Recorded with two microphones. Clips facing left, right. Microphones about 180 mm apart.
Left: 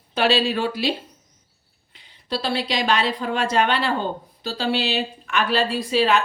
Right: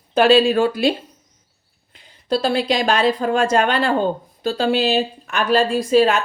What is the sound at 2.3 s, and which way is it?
Speech, 45° right (ahead or behind).